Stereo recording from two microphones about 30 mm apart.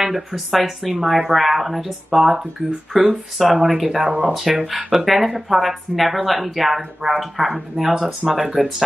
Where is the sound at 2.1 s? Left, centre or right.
Centre.